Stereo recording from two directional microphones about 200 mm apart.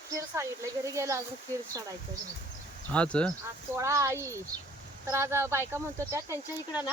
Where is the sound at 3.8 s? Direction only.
15° right (ahead or behind).